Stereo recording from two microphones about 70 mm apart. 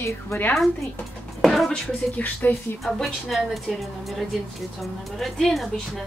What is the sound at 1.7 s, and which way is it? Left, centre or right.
Speech, left.